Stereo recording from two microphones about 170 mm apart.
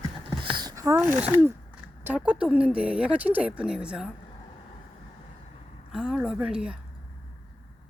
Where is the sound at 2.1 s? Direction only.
5° right (ahead or behind).